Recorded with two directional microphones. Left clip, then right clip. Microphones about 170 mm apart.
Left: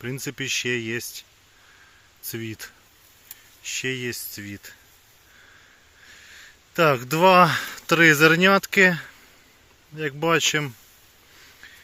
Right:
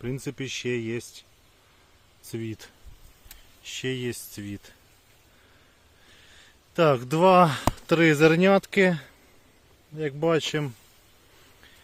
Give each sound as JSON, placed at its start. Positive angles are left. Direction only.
{"t": 0.0, "sound": "speech", "side_deg": -5}
{"t": 2.3, "sound": "speech", "side_deg": -10}
{"t": 6.7, "sound": "speech", "side_deg": -10}